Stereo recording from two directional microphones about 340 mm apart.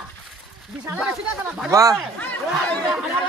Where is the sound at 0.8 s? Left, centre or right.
Centre.